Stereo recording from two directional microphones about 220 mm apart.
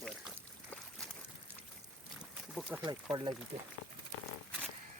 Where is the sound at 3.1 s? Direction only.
20° right (ahead or behind).